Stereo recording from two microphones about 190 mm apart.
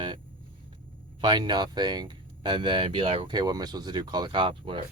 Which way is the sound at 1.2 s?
25° right (ahead or behind).